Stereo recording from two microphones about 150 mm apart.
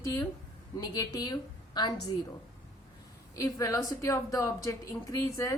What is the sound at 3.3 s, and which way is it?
A woman's voice, 20° left (ahead or behind).